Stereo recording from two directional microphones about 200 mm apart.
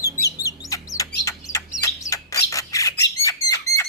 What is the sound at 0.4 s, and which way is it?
Bird, 15° left (ahead or behind).